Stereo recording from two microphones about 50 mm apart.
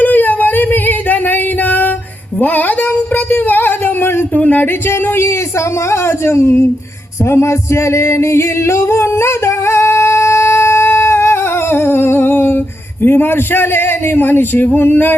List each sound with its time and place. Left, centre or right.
0.0 s singing: left
2.4 s a sound: left
3.3 s singing: left
4.4 s a sound: left
4.6 s music: left
5.9 s speech: left
7.3 s music: left
8.0 s singing: left
13.0 s a man's voice: left
14.8 s music: left